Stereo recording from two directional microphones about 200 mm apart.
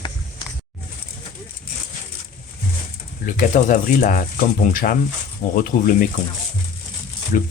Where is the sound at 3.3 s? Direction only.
40° left (ahead or behind).